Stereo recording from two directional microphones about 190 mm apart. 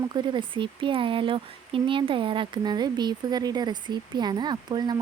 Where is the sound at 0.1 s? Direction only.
25° right (ahead or behind).